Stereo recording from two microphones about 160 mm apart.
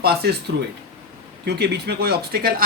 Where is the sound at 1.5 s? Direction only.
90° right.